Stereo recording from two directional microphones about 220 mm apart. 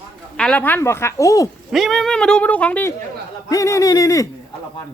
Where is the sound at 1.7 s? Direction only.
Centre (ahead or behind); by 4.2 s 15° left (ahead or behind).